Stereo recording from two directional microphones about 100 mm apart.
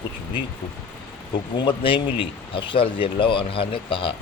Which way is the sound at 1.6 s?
55° left (ahead or behind).